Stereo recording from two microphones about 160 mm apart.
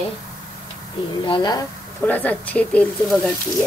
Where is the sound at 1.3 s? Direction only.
25° left (ahead or behind).